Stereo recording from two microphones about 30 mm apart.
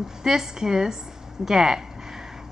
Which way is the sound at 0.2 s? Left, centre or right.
Centre.